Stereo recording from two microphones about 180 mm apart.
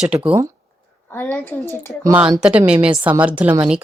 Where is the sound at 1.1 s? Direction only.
10° left (ahead or behind).